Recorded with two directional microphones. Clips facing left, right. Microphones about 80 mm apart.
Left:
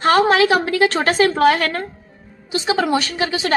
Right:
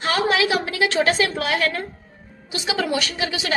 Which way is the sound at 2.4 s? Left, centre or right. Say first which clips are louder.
Left 5 dB; left.